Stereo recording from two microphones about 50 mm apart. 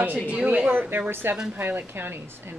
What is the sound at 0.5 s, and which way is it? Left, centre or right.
Speech, right.